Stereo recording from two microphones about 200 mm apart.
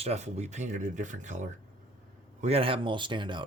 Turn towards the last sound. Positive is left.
turn(degrees=-25)  # may be behind; listen again after turning